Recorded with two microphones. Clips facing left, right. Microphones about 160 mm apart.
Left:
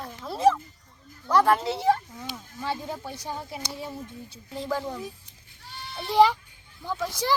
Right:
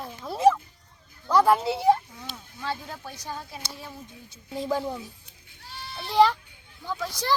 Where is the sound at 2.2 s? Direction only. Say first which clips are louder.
Left 2 dB; 15° left (ahead or behind).